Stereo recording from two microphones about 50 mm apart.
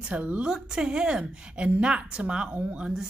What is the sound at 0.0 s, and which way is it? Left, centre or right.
Speech, right.